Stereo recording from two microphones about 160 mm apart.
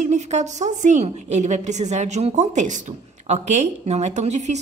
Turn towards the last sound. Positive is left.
turn(degrees=-45)  # may be behind; listen again after turning